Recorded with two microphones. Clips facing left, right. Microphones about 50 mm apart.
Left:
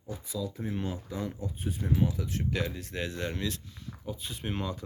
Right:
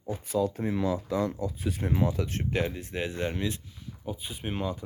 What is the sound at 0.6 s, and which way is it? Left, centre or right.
Speech, right.